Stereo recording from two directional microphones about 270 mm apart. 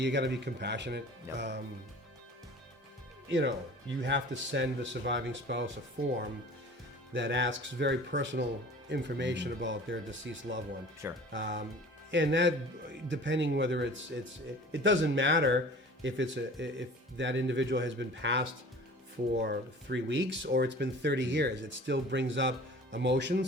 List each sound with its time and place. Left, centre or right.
0.0 s speech: right
3.2 s speech: right
7.1 s speech: right
11.0 s speech: centre
11.3 s speech: right